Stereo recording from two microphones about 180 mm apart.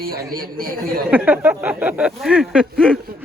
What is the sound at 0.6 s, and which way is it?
Speech, 55° right (ahead or behind).